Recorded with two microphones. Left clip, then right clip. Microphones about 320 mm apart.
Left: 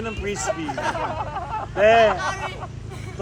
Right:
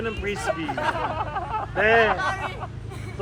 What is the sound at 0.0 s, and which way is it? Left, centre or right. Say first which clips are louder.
Speech: even; left.